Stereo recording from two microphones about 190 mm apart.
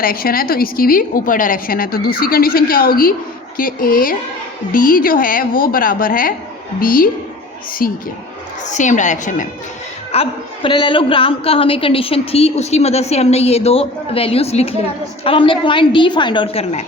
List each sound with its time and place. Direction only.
0.0 s a woman's voice: 50° left (ahead or behind)
10.1 s a woman's voice: 30° left (ahead or behind)